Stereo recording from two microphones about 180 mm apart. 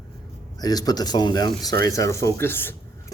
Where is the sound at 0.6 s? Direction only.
20° left (ahead or behind).